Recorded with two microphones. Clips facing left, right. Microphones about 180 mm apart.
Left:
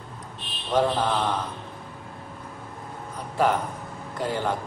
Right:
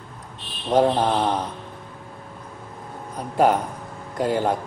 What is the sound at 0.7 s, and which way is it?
Mantra, 45° right (ahead or behind).